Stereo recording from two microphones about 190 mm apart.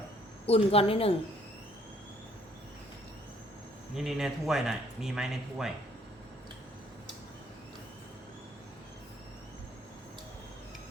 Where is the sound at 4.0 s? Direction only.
Centre (ahead or behind).